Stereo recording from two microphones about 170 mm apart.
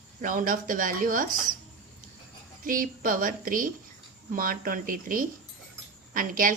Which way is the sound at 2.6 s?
55° right (ahead or behind).